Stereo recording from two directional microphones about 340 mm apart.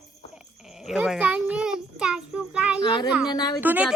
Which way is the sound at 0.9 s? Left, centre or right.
Centre.